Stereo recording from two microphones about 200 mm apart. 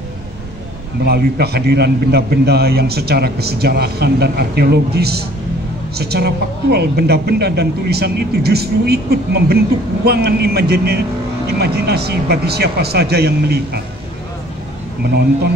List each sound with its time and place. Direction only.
1.0 s a man's voice: 55° right (ahead or behind)